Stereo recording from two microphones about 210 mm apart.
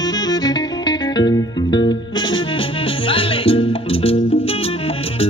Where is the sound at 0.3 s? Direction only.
20° left (ahead or behind).